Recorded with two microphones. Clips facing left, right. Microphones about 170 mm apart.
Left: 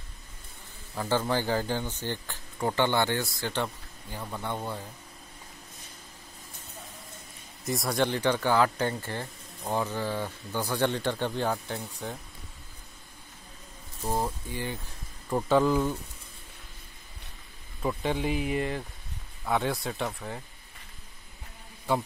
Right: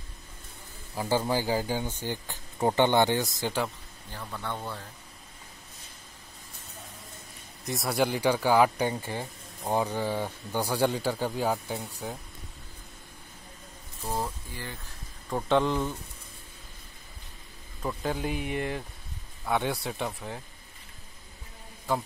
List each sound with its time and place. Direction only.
0.9 s speech: 15° right (ahead or behind)
4.1 s speech: 15° left (ahead or behind)
7.6 s speech: centre (ahead or behind)
14.0 s speech: 15° left (ahead or behind)
15.2 s speech: 5° left (ahead or behind)
17.8 s speech: centre (ahead or behind)